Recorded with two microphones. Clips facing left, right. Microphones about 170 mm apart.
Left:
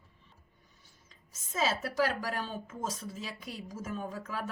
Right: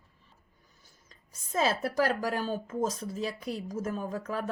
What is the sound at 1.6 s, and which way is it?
Speech, 45° right (ahead or behind).